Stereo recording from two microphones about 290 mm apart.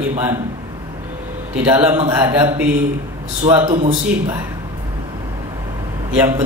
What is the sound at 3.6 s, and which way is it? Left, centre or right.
Speech, right.